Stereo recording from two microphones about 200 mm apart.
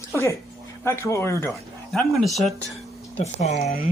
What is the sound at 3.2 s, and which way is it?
Speech, 35° left (ahead or behind).